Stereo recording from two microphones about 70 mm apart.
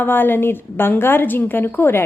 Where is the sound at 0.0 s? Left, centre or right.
Left.